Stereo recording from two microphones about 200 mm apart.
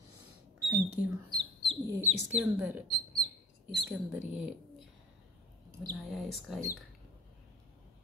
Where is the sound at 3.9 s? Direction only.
5° right (ahead or behind).